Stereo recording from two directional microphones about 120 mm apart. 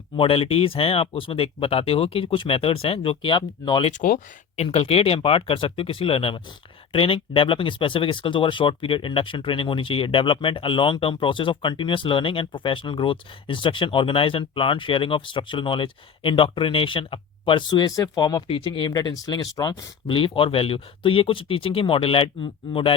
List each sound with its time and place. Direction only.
0.2 s speech: 50° left (ahead or behind)
4.5 s speech: 55° left (ahead or behind); by 18.4 s 35° left (ahead or behind)
18.4 s speech: 45° left (ahead or behind)